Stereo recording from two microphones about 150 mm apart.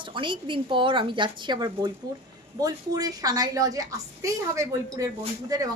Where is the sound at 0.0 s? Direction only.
35° right (ahead or behind).